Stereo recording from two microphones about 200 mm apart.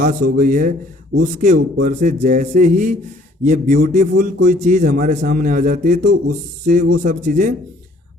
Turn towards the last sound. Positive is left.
turn(degrees=-40)  # may be behind; listen again after turning